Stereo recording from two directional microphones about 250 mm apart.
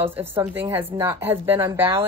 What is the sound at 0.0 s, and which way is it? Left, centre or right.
A woman's voice, centre.